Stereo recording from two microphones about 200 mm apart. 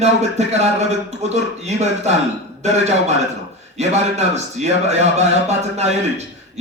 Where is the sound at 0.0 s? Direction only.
35° right (ahead or behind).